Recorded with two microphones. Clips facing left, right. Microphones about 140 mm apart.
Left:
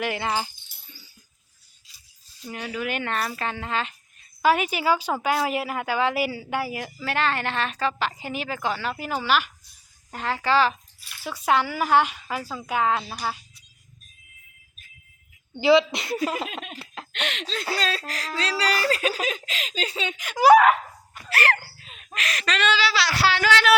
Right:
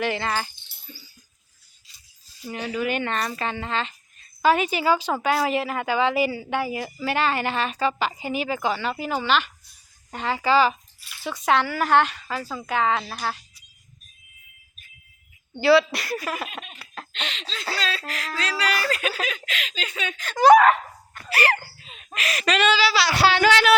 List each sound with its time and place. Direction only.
0.0 s speech: 10° left (ahead or behind)
2.4 s speech: centre (ahead or behind)
15.6 s speech: 20° left (ahead or behind)
16.7 s laughter: 25° left (ahead or behind)
17.1 s speech: 60° left (ahead or behind)
17.7 s speech: 40° left (ahead or behind)
20.1 s speech: 15° left (ahead or behind); by 23.1 s 10° right (ahead or behind)
23.1 s speech: 20° right (ahead or behind)